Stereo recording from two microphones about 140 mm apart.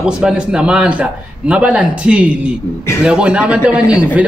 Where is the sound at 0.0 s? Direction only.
5° right (ahead or behind).